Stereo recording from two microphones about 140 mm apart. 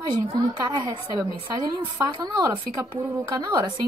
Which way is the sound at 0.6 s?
25° right (ahead or behind).